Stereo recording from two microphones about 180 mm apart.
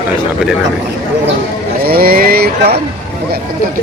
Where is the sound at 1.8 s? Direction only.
55° right (ahead or behind).